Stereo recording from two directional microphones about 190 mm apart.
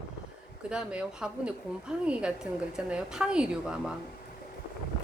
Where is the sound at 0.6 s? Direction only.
5° right (ahead or behind).